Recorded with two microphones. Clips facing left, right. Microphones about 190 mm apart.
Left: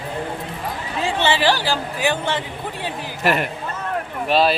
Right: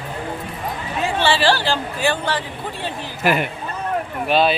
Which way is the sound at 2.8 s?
10° left (ahead or behind).